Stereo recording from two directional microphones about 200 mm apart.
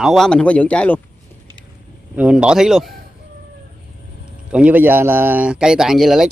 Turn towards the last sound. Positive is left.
turn(degrees=0)  # may be behind; listen again after turning